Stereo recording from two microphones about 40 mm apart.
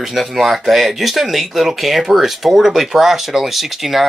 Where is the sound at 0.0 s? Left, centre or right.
Centre.